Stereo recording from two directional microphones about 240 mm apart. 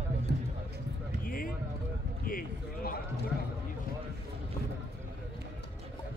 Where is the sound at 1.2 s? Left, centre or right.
Left.